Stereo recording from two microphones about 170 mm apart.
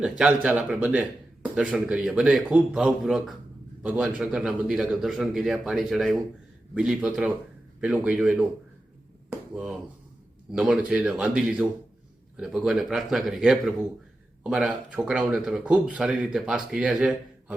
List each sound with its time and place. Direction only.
0.0 s speech: 5° right (ahead or behind)
10.5 s speech: 5° right (ahead or behind)